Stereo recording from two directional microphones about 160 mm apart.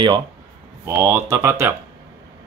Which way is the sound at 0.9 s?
15° right (ahead or behind).